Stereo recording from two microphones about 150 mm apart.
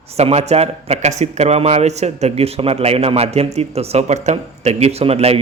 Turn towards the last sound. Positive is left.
turn(degrees=-45)  # may be behind; listen again after turning